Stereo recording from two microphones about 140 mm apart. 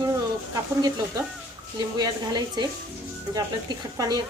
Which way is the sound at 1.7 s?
30° right (ahead or behind).